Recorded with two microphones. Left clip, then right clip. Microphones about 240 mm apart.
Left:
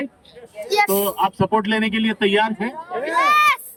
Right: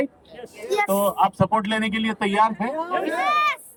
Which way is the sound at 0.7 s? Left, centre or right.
Centre.